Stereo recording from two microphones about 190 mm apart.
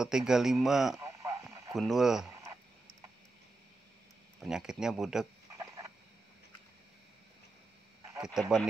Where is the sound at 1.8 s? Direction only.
Centre (ahead or behind).